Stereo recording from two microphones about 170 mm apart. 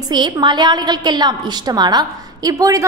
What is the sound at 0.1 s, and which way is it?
A woman's voice, 25° right (ahead or behind).